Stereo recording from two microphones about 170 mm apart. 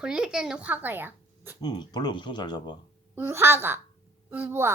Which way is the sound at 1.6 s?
25° left (ahead or behind).